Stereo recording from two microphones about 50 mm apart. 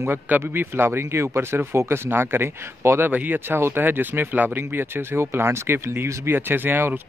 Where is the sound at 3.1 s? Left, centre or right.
Right.